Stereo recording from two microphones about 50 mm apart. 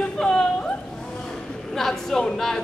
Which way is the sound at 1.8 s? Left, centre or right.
Centre.